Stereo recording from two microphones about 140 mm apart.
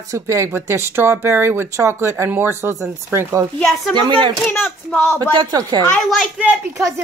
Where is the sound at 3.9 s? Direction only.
35° right (ahead or behind).